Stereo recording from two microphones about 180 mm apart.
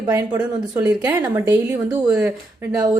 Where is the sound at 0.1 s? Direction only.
20° right (ahead or behind).